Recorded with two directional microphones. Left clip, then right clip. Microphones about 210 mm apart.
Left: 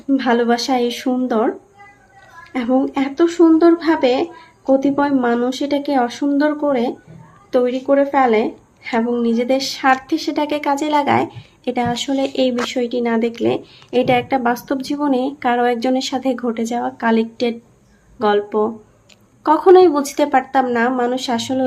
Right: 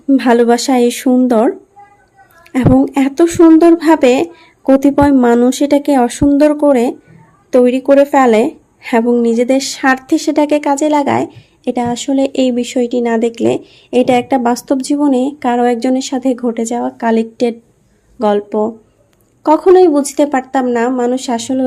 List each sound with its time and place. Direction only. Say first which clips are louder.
0.1 s a woman's voice: right 6 dB; 50° right (ahead or behind)